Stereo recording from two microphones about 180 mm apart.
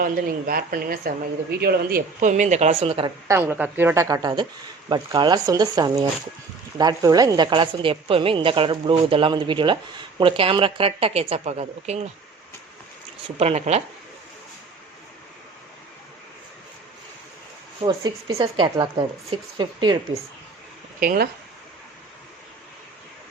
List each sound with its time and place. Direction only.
0.0 s speech: 55° right (ahead or behind); by 3.1 s 30° right (ahead or behind)
3.2 s a woman's voice: 10° right (ahead or behind); by 12.0 s 40° right (ahead or behind)
13.2 s a woman's voice: 35° right (ahead or behind)
17.8 s a woman's voice: 30° right (ahead or behind)
21.0 s speech: 55° right (ahead or behind)